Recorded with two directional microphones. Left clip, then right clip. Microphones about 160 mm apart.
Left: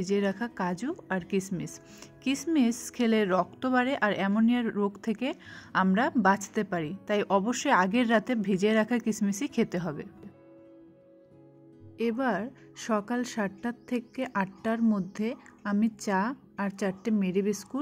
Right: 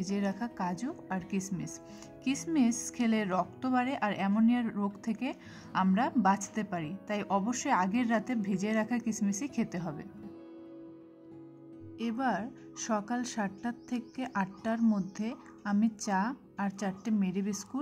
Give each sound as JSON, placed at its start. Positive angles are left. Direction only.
{"t": 0.0, "sound": "a woman's voice", "side_deg": 20}
{"t": 12.0, "sound": "speech", "side_deg": 20}